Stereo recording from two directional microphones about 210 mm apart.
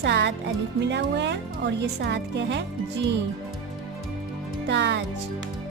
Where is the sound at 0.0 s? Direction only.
55° right (ahead or behind).